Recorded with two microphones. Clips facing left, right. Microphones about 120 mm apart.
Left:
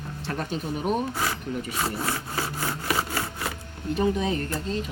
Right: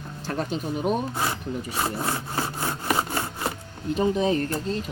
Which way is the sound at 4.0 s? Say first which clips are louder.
Right 2 dB; 30° right (ahead or behind).